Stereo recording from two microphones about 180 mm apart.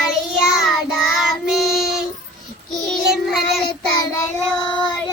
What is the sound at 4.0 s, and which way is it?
Child singing, 20° left (ahead or behind).